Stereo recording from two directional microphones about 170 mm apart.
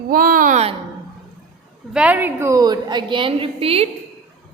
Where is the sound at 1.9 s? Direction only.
10° right (ahead or behind); by 3.9 s 35° right (ahead or behind).